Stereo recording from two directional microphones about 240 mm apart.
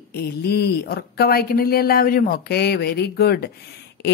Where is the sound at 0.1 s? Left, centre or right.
Left.